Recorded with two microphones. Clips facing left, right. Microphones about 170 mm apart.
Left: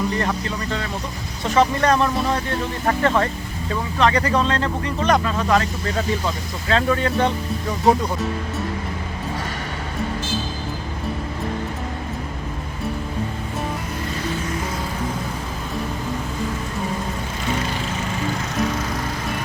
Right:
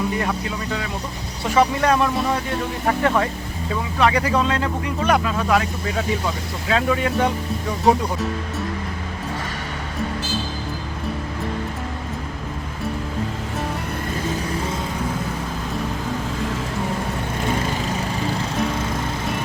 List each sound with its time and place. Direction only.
0.1 s speech: 5° right (ahead or behind)